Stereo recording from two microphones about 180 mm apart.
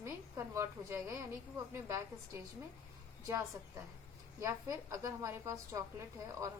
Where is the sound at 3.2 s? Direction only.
20° right (ahead or behind).